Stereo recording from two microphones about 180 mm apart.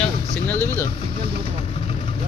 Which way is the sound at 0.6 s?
10° left (ahead or behind).